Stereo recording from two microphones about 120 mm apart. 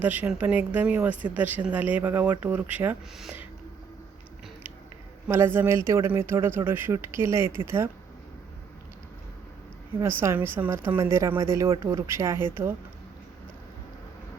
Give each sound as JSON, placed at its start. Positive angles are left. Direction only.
{"t": 0.0, "sound": "speech", "side_deg": -15}
{"t": 5.3, "sound": "a woman's voice", "side_deg": -20}
{"t": 10.0, "sound": "a woman's voice", "side_deg": -20}